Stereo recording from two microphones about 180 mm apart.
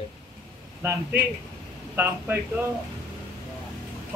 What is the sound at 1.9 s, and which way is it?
Speech, 10° right (ahead or behind).